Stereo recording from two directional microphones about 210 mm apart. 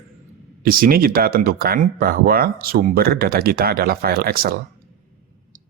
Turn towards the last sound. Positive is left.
turn(degrees=-45)  # may be behind; listen again after turning